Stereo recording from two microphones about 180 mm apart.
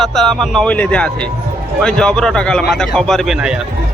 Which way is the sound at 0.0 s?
Centre (ahead or behind).